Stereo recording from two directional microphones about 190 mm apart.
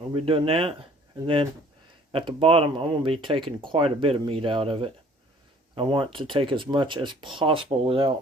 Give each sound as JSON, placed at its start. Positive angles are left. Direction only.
{"t": 0.1, "sound": "speech", "side_deg": -30}
{"t": 2.1, "sound": "speech", "side_deg": -30}